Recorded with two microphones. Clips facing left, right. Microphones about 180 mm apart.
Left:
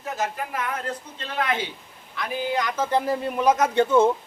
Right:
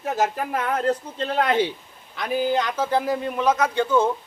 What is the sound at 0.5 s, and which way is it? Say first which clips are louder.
A woman's voice: right 7 dB; 45° right (ahead or behind).